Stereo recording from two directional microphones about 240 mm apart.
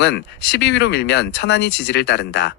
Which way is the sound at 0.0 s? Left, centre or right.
Left.